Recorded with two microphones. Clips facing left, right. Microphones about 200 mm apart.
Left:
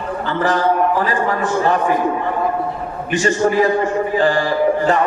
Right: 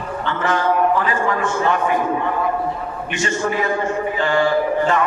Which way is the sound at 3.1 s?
35° left (ahead or behind).